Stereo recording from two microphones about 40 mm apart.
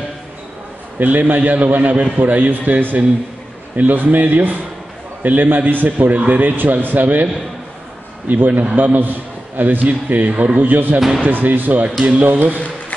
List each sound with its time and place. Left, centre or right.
0.9 s a man's voice: right
8.3 s a man's voice: right
10.7 s a man's voice: right